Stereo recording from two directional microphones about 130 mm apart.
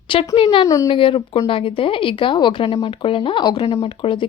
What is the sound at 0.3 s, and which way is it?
Speech, 45° left (ahead or behind).